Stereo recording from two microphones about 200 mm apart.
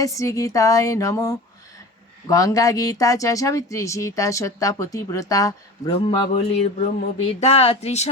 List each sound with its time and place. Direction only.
0.0 s speech: 15° left (ahead or behind); by 8.1 s 35° left (ahead or behind)